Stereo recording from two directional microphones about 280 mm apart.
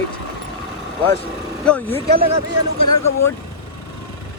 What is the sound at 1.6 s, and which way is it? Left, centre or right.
Speech, centre.